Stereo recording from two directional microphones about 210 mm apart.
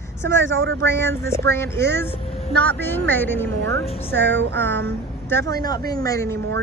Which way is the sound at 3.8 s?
30° left (ahead or behind).